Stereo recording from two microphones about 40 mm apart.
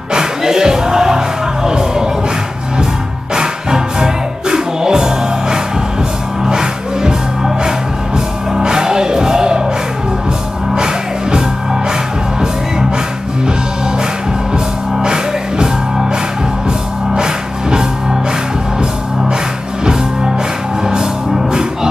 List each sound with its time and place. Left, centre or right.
0.1 s music: centre
3.3 s music: centre
10.7 s music: centre
14.5 s music: centre
20.8 s music: centre